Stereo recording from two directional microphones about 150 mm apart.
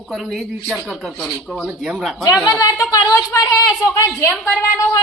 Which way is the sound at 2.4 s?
20° left (ahead or behind).